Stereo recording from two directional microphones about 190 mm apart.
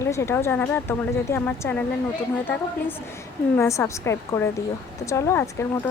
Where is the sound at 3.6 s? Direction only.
15° left (ahead or behind).